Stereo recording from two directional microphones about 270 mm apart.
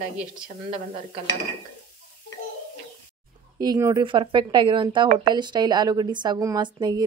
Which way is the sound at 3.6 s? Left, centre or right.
Centre.